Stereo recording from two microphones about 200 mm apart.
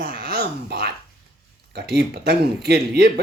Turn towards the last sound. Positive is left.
turn(degrees=-50)  # may be behind; listen again after turning